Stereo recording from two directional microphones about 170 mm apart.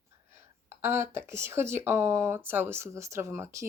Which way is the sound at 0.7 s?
15° right (ahead or behind).